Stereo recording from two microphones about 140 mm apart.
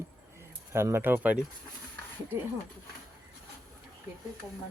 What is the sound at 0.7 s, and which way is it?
Speech, 20° right (ahead or behind).